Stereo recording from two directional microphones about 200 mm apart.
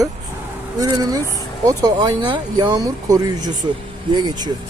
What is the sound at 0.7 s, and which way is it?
Speech, 20° right (ahead or behind).